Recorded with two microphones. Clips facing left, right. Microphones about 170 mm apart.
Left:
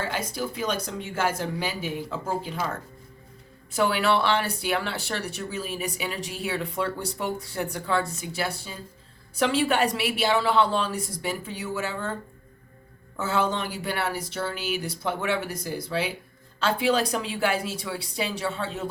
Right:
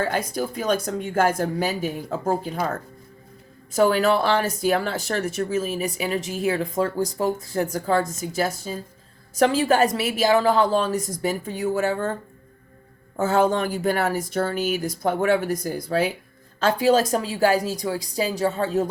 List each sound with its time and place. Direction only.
0.0 s a woman's voice: 45° right (ahead or behind)
13.1 s a woman's voice: 45° right (ahead or behind)